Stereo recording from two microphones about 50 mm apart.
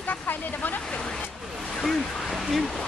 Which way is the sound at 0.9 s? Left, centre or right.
Left.